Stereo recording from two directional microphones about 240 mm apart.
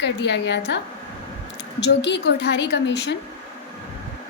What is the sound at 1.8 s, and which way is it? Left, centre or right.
A woman's voice, left.